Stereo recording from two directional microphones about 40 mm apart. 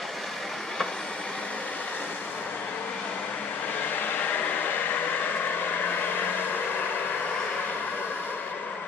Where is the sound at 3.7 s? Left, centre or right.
Left.